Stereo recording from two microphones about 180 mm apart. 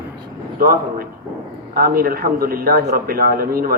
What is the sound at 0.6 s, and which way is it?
A man's voice, 55° right (ahead or behind).